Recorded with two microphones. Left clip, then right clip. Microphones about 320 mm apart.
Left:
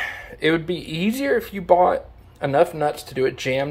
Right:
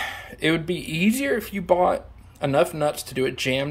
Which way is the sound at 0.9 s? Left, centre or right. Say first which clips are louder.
Left 2 dB; centre.